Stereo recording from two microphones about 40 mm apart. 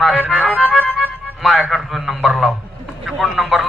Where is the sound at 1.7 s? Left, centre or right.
Centre.